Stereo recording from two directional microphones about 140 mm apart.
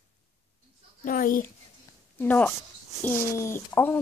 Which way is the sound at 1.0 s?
90° left.